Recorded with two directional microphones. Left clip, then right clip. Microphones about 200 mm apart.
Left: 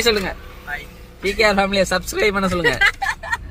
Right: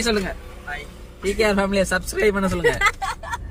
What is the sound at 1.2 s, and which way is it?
Speech, 30° left (ahead or behind).